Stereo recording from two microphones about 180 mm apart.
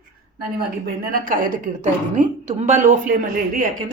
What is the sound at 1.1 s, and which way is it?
A woman's voice, 50° right (ahead or behind).